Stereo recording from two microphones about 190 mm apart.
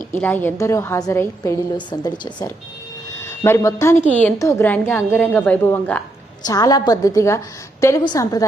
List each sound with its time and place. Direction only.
0.1 s a woman's voice: 10° left (ahead or behind)
6.4 s a woman's voice: 20° left (ahead or behind)